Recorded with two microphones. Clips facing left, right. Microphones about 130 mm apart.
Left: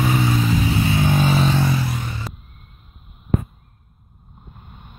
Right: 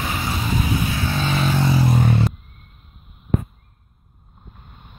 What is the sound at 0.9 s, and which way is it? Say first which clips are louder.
Vehicle: left 5 dB; 15° left (ahead or behind).